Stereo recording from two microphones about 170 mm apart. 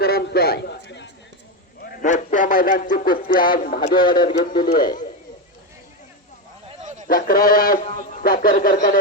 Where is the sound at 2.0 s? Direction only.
50° left (ahead or behind).